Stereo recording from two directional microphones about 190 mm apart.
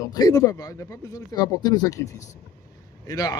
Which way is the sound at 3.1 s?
20° left (ahead or behind).